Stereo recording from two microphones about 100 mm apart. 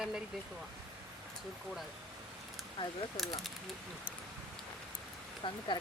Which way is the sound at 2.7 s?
60° left (ahead or behind).